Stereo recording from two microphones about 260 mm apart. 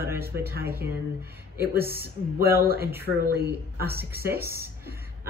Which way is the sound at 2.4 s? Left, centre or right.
Right.